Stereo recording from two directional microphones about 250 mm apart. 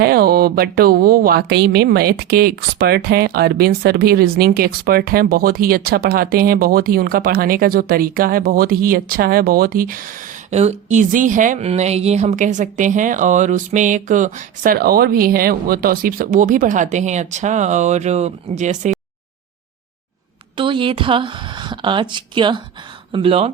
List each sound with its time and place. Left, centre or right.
0.0 s speech: right
20.6 s a woman's voice: centre